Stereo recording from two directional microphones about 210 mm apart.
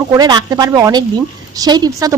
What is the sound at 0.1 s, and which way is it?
A woman's voice, 20° right (ahead or behind).